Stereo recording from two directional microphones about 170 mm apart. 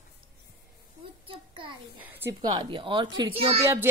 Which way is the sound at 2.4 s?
25° right (ahead or behind).